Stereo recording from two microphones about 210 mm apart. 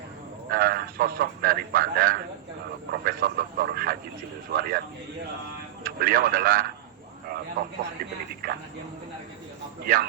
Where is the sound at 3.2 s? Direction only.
45° right (ahead or behind).